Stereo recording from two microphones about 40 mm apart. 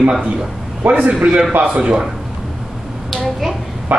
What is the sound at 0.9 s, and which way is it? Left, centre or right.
A man's voice, right.